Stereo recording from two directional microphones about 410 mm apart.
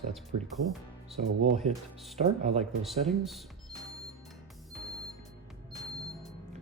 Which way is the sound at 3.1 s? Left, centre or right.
Centre.